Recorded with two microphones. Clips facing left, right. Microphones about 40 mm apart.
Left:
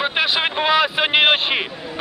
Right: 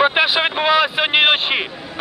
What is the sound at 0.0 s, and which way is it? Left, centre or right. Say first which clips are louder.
Vehicle: right 4 dB; centre.